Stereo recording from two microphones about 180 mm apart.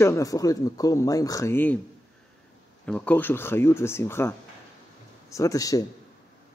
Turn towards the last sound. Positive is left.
turn(degrees=20)  # may be behind; listen again after turning